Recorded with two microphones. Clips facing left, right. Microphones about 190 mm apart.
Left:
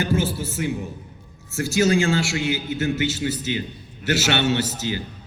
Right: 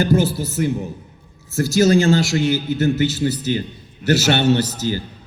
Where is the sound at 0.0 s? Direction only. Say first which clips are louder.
Right 5 dB; 40° right (ahead or behind).